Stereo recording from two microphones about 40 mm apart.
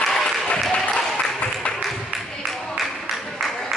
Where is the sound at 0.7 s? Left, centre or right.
Left.